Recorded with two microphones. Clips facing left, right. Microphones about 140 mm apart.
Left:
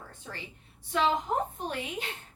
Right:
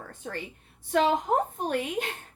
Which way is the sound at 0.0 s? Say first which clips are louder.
Right 7 dB; 55° right (ahead or behind).